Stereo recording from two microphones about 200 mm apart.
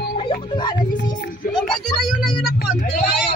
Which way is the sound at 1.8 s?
Centre (ahead or behind).